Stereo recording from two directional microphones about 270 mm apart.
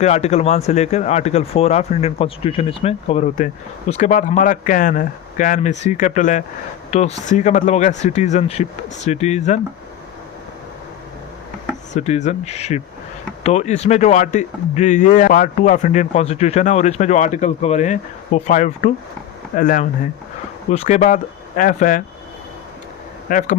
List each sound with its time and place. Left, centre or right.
0.0 s speech: left
11.9 s speech: left
23.3 s speech: left